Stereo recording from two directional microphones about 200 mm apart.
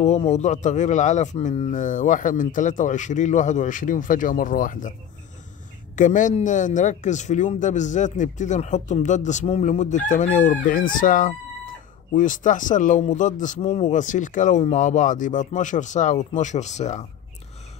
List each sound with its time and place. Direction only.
0.0 s speech: 35° left (ahead or behind)
5.9 s speech: 40° left (ahead or behind)